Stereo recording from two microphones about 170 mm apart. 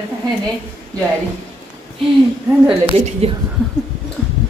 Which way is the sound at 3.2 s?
35° right (ahead or behind).